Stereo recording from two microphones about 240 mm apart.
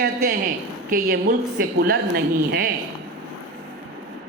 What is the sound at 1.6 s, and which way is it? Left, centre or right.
Speech, right.